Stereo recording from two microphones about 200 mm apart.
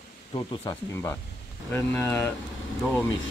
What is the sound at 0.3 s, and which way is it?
Speech, 20° left (ahead or behind).